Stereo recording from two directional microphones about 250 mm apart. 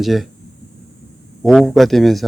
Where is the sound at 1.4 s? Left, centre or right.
Centre.